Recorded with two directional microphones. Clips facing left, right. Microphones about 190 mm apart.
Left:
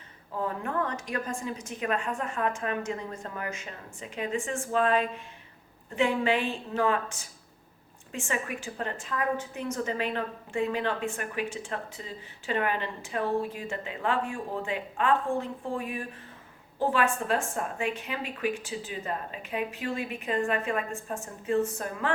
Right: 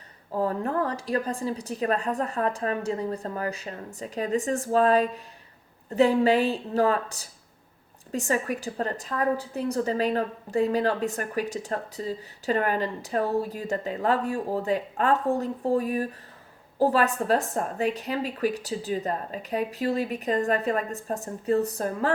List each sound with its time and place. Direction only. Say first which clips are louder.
0.3 s a woman's voice: right 5 dB; 35° right (ahead or behind)